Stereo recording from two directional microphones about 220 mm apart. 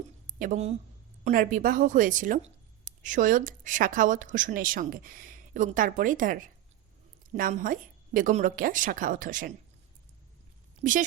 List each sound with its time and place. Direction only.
0.3 s a woman's voice: 35° right (ahead or behind)